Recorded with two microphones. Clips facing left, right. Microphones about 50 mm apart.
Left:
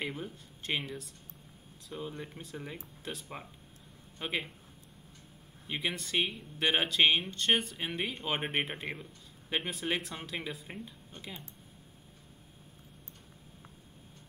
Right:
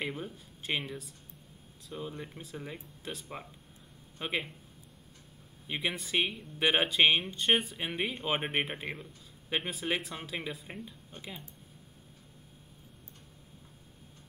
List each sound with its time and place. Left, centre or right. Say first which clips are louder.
0.0 s speech: right 1 dB; centre
5.7 s speech: right 1 dB; centre